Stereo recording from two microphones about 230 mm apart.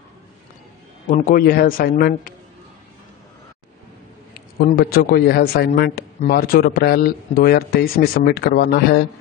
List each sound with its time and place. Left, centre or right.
1.0 s a man's voice: left
4.6 s a man's voice: left